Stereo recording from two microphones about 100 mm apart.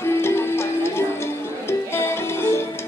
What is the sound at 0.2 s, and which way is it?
Music, 25° left (ahead or behind).